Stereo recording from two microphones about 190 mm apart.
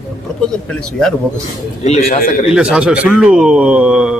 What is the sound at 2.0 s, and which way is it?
Speech, 45° left (ahead or behind).